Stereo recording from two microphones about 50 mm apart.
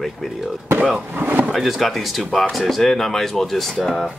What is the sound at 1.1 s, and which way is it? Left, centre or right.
Speech, right.